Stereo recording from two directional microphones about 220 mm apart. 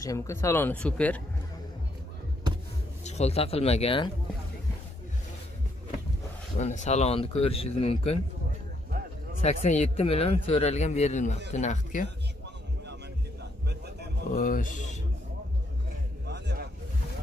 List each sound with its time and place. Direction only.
0.0 s speech: 15° left (ahead or behind)
3.0 s speech: 30° left (ahead or behind)
6.6 s speech: 30° left (ahead or behind)
9.4 s a man's voice: 30° left (ahead or behind)
13.7 s a sound: 50° right (ahead or behind)
14.3 s a man's voice: 40° left (ahead or behind)
16.3 s a sound: 50° right (ahead or behind)